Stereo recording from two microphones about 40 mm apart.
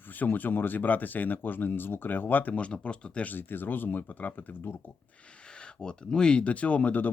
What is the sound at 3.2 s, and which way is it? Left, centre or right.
Speech, left.